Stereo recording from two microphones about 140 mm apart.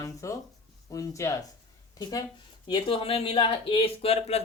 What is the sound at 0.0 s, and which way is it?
Speech, 20° left (ahead or behind).